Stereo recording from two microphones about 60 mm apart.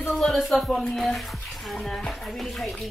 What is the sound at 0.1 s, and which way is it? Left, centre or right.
Speech, centre.